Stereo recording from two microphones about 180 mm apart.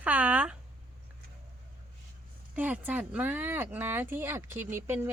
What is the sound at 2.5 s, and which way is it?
Speech, 10° right (ahead or behind).